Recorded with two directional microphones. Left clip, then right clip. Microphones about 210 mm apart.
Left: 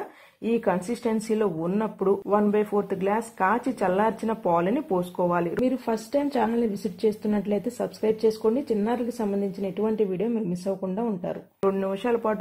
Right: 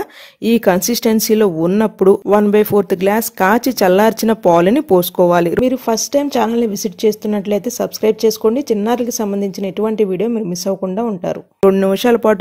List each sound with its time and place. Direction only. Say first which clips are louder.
0.4 s speech: right 11 dB; 45° right (ahead or behind)
5.6 s speech: right 11 dB; 25° right (ahead or behind)
11.7 s speech: right 13 dB; 50° right (ahead or behind)